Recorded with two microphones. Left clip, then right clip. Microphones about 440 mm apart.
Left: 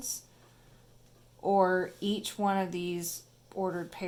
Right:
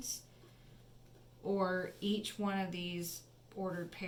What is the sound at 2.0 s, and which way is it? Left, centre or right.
A woman's voice, centre.